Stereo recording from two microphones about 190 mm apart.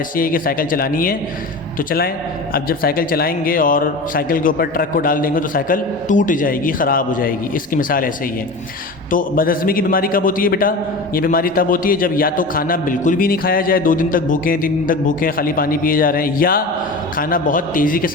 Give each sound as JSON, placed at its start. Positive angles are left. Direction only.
{"t": 0.2, "sound": "a man's voice", "side_deg": 50}
{"t": 2.5, "sound": "a man's voice", "side_deg": 50}
{"t": 9.1, "sound": "a man's voice", "side_deg": 50}